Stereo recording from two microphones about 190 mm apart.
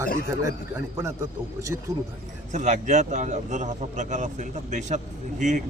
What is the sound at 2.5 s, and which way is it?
A man's voice, 40° right (ahead or behind).